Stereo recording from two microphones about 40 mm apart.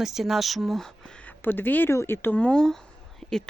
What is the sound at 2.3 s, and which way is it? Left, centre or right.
Speech, left.